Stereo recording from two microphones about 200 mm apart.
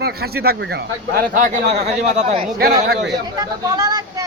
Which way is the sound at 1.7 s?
35° right (ahead or behind).